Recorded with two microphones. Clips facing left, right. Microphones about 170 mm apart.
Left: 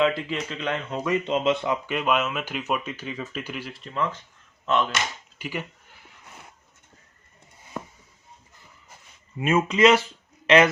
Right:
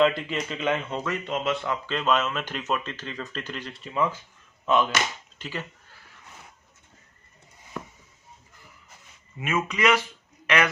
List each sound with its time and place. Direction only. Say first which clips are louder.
0.0 s speech: right 1 dB; centre (ahead or behind)
1.0 s speech: left 10 dB; 20° left (ahead or behind)
3.8 s speech: right 3 dB; 5° right (ahead or behind)
5.4 s a sound: left 3 dB; 15° left (ahead or behind)
9.4 s speech: left 6 dB; 30° left (ahead or behind)